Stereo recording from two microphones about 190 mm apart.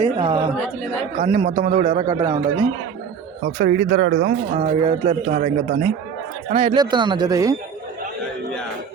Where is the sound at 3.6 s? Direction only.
55° right (ahead or behind).